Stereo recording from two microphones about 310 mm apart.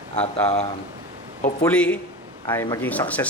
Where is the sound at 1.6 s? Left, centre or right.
Centre.